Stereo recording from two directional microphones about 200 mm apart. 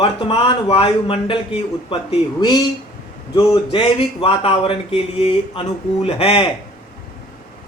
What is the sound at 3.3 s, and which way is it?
Speech, 25° left (ahead or behind).